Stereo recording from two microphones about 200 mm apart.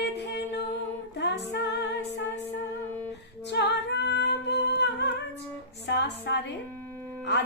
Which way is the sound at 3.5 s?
60° left (ahead or behind).